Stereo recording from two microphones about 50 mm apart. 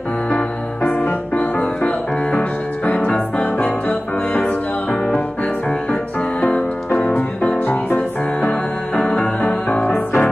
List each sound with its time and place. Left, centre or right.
1.3 s music: left
7.2 s music: left
9.0 s music: left